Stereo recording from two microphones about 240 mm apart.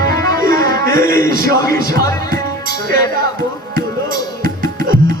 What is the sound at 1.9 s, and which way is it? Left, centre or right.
Music, centre.